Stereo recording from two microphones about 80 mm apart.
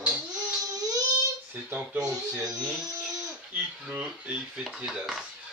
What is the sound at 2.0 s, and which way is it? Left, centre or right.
Speech, right.